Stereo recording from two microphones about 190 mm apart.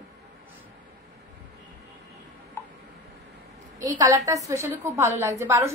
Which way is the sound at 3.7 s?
20° right (ahead or behind).